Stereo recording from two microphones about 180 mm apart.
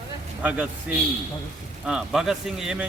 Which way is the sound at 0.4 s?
10° right (ahead or behind).